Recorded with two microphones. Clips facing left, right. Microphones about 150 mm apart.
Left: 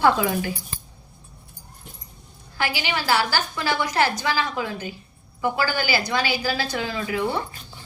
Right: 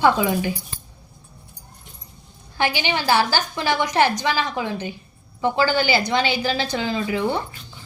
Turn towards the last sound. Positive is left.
turn(degrees=-25)  # may be behind; listen again after turning